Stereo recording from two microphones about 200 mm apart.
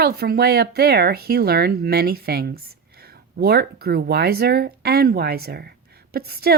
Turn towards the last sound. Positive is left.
turn(degrees=-50)  # may be behind; listen again after turning